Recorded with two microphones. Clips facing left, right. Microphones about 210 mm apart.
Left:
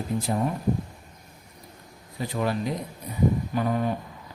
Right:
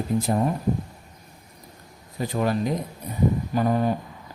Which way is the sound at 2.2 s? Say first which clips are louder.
Right 3 dB; 45° right (ahead or behind).